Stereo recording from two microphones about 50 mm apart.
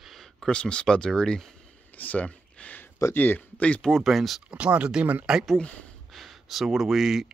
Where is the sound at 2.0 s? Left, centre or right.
Left.